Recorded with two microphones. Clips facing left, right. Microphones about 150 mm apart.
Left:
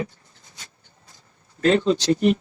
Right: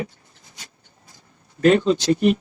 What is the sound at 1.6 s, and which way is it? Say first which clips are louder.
Speech: right 3 dB; 25° left (ahead or behind).